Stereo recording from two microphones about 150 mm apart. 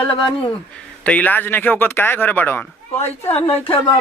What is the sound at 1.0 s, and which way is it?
Speech, 10° left (ahead or behind).